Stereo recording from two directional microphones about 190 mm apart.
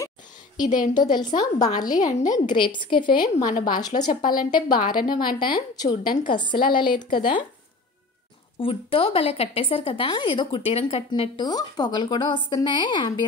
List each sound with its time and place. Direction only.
0.7 s a woman's voice: 40° left (ahead or behind)
0.9 s speech: 20° left (ahead or behind)
3.4 s a woman's voice: 45° left (ahead or behind)
3.7 s speech: 20° left (ahead or behind)
4.7 s a woman's voice: 45° left (ahead or behind)
5.0 s speech: 25° left (ahead or behind)
6.0 s a woman's voice: 45° left (ahead or behind)
6.3 s speech: 25° left (ahead or behind)
8.5 s speech: 30° left (ahead or behind)